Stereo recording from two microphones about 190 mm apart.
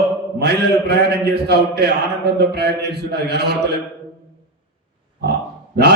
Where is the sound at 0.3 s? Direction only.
55° right (ahead or behind).